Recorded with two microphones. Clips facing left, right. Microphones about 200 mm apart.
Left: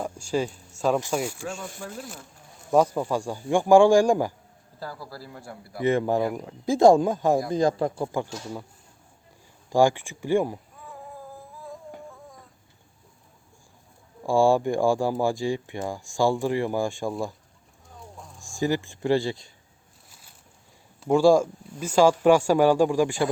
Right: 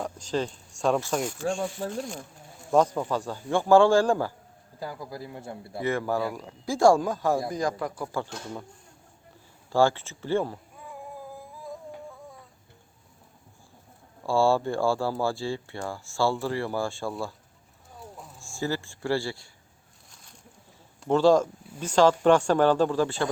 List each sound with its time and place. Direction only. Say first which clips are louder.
0.0 s speech: left 2 dB; 10° left (ahead or behind)
4.8 s a man's voice: right 2 dB; 15° right (ahead or behind)
5.8 s speech: left 5 dB; 20° left (ahead or behind)
9.6 s speech: left 2 dB; 15° left (ahead or behind)
14.3 s speech: left 3 dB; 15° left (ahead or behind)
18.3 s speech: left 5 dB; 15° left (ahead or behind)
20.1 s bird: even; 5° left (ahead or behind)
21.0 s speech: left 2 dB; 10° left (ahead or behind)